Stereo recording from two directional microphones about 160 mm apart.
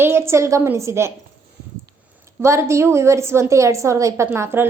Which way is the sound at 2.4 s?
15° right (ahead or behind).